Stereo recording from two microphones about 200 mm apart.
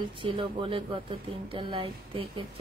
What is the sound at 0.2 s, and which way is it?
Speech, 25° right (ahead or behind).